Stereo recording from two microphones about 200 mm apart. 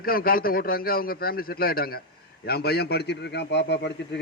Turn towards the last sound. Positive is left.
turn(degrees=60)  # may be behind; listen again after turning